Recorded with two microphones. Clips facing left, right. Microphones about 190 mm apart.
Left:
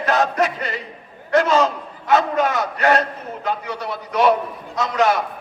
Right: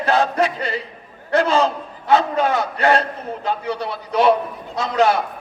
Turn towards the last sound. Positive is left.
turn(degrees=-30)  # may be behind; listen again after turning